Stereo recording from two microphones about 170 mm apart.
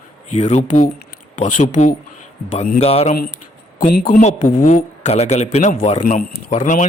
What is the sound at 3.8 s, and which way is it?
A man's voice, 55° left (ahead or behind).